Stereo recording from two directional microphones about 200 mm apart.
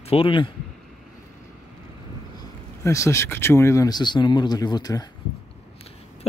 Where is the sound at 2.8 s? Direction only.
15° left (ahead or behind).